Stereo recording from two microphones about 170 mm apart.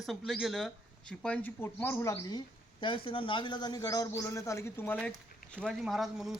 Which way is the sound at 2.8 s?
30° left (ahead or behind).